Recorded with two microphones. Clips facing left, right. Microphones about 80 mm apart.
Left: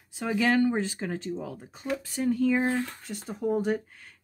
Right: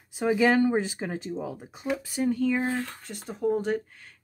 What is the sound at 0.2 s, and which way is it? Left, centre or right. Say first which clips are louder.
Speech: right 3 dB; centre.